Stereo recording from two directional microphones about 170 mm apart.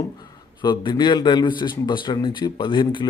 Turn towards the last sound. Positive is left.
turn(degrees=30)  # may be behind; listen again after turning